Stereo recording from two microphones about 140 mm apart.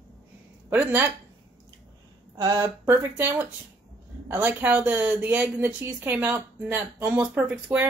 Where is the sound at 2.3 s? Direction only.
20° right (ahead or behind).